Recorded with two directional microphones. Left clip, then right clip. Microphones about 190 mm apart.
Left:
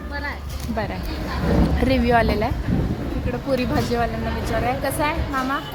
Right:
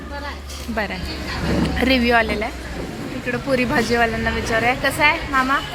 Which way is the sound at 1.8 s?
5° left (ahead or behind).